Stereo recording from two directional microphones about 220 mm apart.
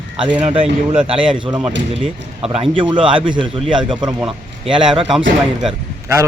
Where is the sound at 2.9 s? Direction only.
25° right (ahead or behind).